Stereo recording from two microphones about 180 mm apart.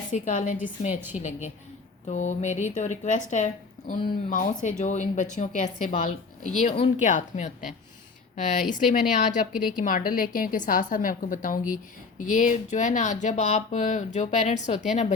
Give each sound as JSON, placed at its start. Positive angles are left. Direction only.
{"t": 0.1, "sound": "speech", "side_deg": 45}
{"t": 6.6, "sound": "speech", "side_deg": 35}